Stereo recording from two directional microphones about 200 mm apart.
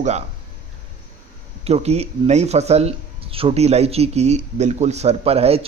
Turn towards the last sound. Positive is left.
turn(degrees=-30)  # may be behind; listen again after turning